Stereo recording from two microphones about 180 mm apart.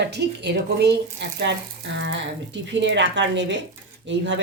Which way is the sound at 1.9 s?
85° right.